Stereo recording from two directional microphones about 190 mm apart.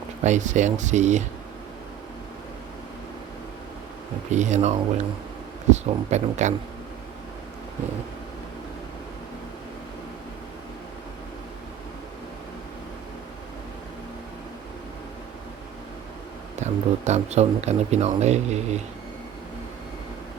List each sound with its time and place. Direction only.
0.2 s speech: 40° right (ahead or behind)
4.3 s speech: 40° right (ahead or behind)
16.6 s speech: 35° right (ahead or behind)